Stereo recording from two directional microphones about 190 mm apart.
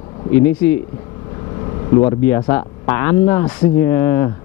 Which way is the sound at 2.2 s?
10° left (ahead or behind).